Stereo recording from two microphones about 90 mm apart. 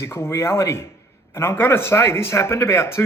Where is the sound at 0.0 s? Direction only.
30° left (ahead or behind).